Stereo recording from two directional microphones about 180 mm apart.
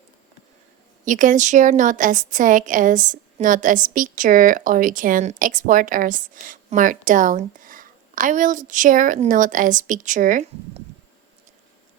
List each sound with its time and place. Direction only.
1.0 s a woman's voice: 45° right (ahead or behind)